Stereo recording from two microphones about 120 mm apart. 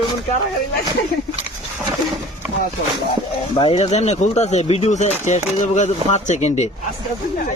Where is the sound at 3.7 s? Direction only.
65° left (ahead or behind).